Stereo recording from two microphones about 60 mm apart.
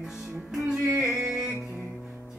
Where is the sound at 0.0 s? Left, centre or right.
Centre.